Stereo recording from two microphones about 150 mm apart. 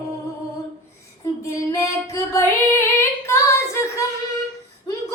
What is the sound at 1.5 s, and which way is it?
Female singing, 20° left (ahead or behind).